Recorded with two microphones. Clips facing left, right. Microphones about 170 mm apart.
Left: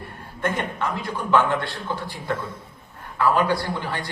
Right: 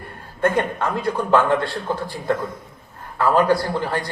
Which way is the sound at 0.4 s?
50° right (ahead or behind).